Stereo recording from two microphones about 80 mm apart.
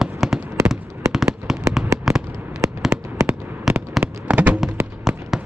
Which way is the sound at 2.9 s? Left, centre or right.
Right.